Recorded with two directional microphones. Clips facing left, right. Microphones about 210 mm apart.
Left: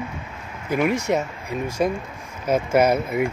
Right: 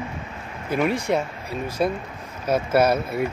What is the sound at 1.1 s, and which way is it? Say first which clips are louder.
Speech: left 1 dB; 10° left (ahead or behind).